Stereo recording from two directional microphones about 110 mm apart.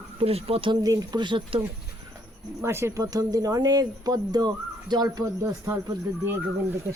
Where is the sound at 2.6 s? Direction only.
25° right (ahead or behind).